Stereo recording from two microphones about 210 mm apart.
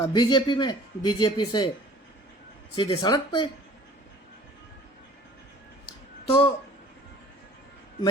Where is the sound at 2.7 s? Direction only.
20° left (ahead or behind).